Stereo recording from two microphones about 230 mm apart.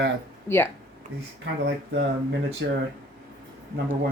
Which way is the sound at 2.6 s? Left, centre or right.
Right.